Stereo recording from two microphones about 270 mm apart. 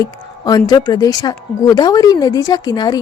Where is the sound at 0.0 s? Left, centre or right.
Centre.